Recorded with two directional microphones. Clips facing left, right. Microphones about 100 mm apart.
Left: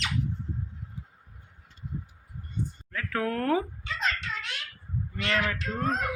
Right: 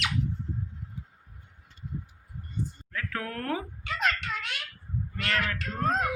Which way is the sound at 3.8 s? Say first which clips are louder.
Right 2 dB; 55° right (ahead or behind).